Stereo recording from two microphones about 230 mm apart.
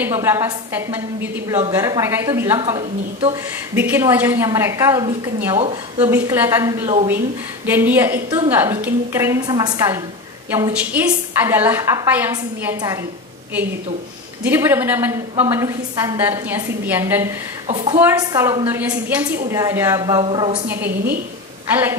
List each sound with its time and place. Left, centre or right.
0.0 s a woman's voice: centre
2.6 s a woman's voice: right
3.7 s a woman's voice: centre
14.4 s a woman's voice: centre
17.6 s a woman's voice: right
17.9 s a woman's voice: centre
20.6 s a woman's voice: centre